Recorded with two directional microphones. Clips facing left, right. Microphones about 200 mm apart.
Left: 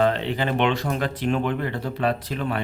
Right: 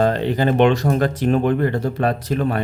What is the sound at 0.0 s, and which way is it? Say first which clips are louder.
Speech: right 4 dB; 40° right (ahead or behind).